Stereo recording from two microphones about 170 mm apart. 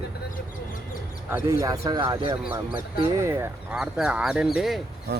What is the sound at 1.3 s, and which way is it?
Speech, 15° right (ahead or behind).